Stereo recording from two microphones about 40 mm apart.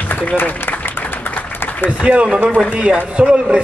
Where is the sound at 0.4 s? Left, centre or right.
Left.